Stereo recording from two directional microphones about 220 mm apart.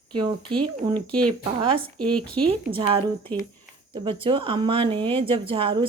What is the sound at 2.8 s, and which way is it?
Speech, 20° right (ahead or behind).